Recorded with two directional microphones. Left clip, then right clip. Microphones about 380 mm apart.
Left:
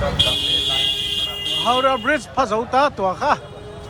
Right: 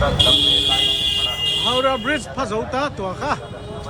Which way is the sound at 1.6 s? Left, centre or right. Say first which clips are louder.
Left 4 dB; centre.